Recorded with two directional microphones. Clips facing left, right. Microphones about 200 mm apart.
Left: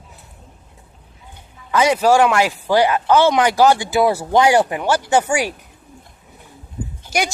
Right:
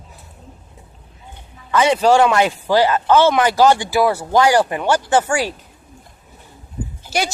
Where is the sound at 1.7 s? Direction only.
10° left (ahead or behind).